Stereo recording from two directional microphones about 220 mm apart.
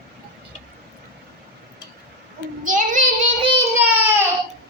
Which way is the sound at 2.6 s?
35° right (ahead or behind).